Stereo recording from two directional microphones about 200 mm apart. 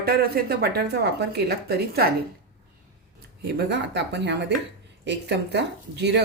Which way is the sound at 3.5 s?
60° right (ahead or behind).